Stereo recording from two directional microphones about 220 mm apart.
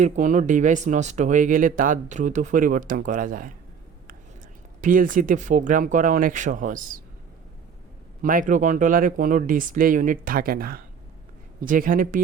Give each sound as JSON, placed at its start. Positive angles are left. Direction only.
{"t": 0.0, "sound": "speech", "side_deg": -35}
{"t": 4.8, "sound": "speech", "side_deg": -35}
{"t": 8.2, "sound": "speech", "side_deg": -40}